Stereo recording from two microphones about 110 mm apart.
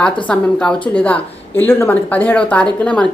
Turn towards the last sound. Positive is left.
turn(degrees=10)  # may be behind; listen again after turning